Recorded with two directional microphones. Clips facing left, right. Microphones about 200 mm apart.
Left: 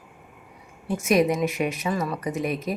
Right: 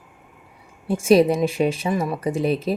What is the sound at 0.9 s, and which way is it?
Speech, 30° right (ahead or behind).